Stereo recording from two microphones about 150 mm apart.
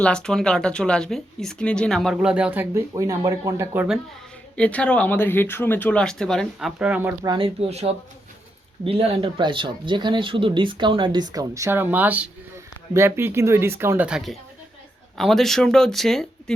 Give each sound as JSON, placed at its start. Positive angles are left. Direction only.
{"t": 0.0, "sound": "speech", "side_deg": 5}
{"t": 4.5, "sound": "speech", "side_deg": 10}
{"t": 7.3, "sound": "speech", "side_deg": -40}